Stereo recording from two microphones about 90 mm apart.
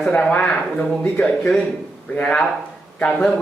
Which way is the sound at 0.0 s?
15° left (ahead or behind).